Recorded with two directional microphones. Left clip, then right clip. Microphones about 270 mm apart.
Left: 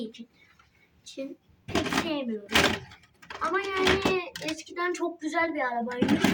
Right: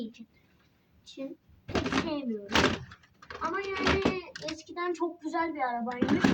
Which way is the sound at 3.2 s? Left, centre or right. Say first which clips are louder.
Left 4 dB; centre.